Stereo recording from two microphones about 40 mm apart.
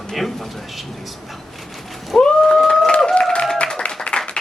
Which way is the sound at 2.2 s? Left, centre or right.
Centre.